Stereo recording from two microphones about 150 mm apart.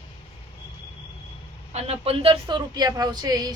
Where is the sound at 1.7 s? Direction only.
45° right (ahead or behind); by 3.5 s 25° right (ahead or behind).